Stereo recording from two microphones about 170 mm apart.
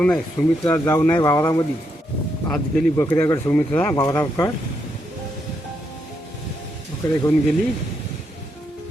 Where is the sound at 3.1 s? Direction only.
15° left (ahead or behind).